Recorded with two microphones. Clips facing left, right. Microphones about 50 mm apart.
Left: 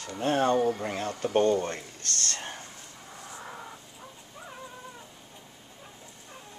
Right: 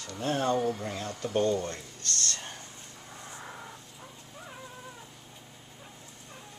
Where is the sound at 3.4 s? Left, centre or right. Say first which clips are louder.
Left 3 dB; centre.